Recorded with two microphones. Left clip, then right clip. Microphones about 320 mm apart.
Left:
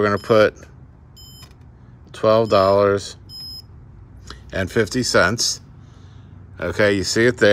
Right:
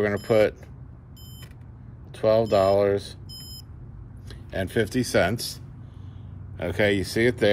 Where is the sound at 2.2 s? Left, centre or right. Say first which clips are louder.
Left 5 dB; centre.